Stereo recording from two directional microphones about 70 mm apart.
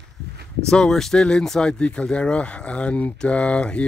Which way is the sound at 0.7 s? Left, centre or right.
Centre.